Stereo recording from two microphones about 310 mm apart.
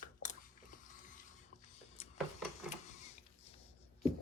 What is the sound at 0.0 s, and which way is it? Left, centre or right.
Biting, left.